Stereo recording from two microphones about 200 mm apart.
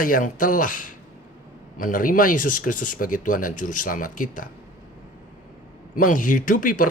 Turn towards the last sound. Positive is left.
turn(degrees=45)  # may be behind; listen again after turning